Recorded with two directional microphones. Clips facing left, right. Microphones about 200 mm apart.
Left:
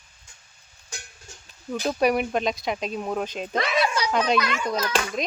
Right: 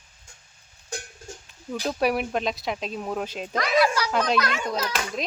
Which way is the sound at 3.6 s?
25° left (ahead or behind).